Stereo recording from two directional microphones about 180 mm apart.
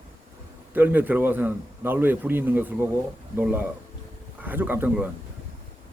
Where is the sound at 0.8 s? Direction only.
10° right (ahead or behind).